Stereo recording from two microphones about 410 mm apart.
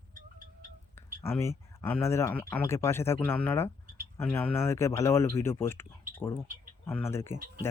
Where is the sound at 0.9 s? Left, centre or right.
Centre.